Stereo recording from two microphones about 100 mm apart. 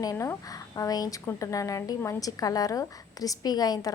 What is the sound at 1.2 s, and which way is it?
A woman's voice, 30° left (ahead or behind).